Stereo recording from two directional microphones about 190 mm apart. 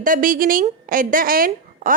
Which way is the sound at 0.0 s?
45° right (ahead or behind).